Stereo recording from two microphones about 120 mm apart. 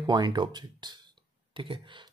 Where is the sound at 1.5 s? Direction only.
45° right (ahead or behind).